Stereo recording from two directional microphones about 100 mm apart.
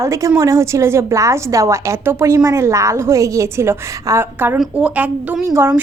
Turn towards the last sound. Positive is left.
turn(degrees=-25)  # may be behind; listen again after turning